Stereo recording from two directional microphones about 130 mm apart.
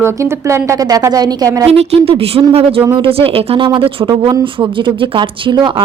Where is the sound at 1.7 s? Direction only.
50° right (ahead or behind).